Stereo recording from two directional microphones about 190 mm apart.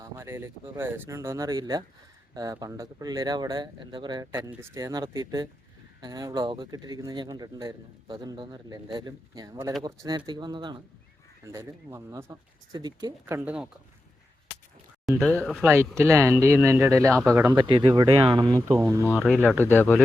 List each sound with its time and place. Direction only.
0.0 s speech: 15° right (ahead or behind)
15.0 s speech: 5° left (ahead or behind)
15.6 s speech: 10° right (ahead or behind)
18.7 s speech: 10° right (ahead or behind)
19.1 s speech: 10° left (ahead or behind)